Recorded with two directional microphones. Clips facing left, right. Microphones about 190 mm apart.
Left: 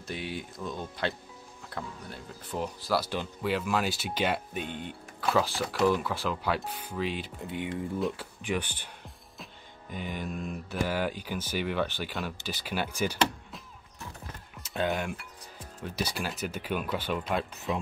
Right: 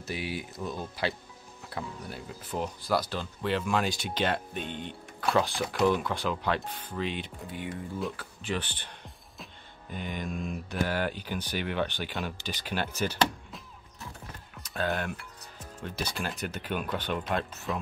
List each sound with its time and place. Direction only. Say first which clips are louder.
0.0 s speech: right 1 dB; 5° right (ahead or behind)
7.4 s speech: left 7 dB; 20° left (ahead or behind)
14.6 s mechanisms: left 2 dB; 20° left (ahead or behind)
15.8 s speech: left 1 dB; 10° left (ahead or behind)